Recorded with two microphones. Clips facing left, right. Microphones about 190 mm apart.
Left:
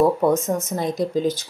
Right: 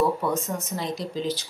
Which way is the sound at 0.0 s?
45° left (ahead or behind).